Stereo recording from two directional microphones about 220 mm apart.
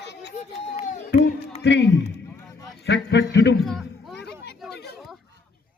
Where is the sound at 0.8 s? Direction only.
30° left (ahead or behind).